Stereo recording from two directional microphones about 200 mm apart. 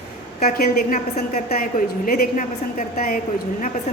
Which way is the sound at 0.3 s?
35° left (ahead or behind).